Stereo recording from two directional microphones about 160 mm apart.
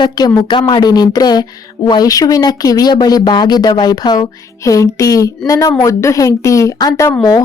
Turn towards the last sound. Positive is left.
turn(degrees=20)  # may be behind; listen again after turning